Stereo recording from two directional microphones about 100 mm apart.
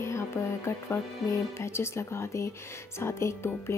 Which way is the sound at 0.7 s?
25° left (ahead or behind).